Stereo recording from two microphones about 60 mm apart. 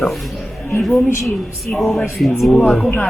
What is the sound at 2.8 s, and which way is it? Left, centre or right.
Speech, left.